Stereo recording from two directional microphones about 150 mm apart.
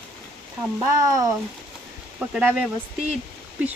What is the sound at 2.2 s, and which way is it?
Speech, 10° right (ahead or behind).